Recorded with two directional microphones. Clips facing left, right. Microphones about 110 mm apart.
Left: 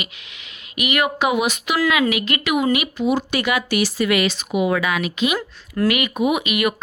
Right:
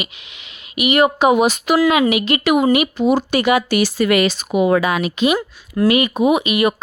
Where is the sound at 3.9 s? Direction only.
45° right (ahead or behind).